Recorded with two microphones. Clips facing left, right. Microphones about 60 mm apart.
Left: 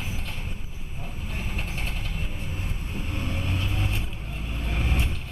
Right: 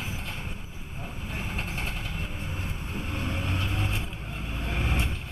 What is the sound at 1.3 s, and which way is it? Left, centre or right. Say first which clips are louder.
Vehicle: even; centre.